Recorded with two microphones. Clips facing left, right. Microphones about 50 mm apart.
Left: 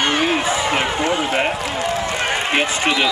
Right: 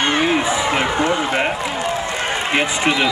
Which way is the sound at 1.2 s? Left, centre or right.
Centre.